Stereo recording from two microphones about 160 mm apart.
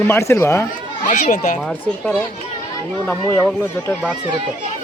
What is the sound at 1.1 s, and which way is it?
Speech, 50° left (ahead or behind).